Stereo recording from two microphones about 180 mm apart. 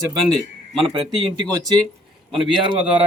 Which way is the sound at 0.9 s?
25° right (ahead or behind).